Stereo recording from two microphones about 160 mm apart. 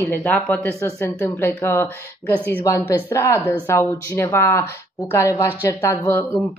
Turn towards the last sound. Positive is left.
turn(degrees=15)  # may be behind; listen again after turning